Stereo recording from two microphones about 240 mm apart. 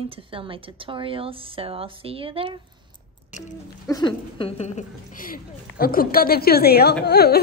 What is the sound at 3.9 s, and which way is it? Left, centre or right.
A woman's voice, centre.